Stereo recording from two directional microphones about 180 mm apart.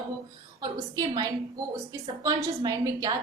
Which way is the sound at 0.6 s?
20° right (ahead or behind).